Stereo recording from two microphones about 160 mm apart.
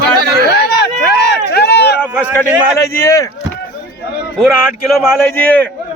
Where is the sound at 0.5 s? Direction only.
90° left.